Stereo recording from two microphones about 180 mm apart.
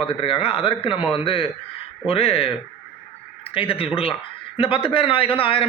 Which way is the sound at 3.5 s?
30° left (ahead or behind).